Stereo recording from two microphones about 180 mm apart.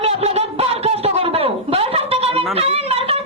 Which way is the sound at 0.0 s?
35° right (ahead or behind).